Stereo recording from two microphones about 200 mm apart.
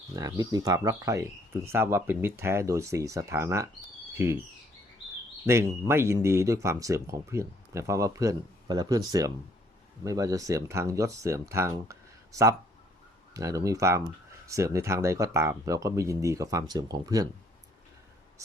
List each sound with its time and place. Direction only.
0.2 s speech: 15° right (ahead or behind)
5.5 s speech: 15° right (ahead or behind)